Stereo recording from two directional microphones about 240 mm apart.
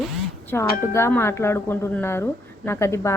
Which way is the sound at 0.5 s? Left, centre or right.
Centre.